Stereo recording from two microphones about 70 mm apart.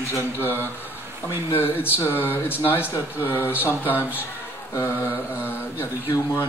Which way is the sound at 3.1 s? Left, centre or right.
Left.